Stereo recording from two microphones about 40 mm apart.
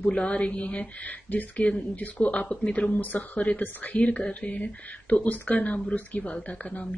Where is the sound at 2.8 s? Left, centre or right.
Left.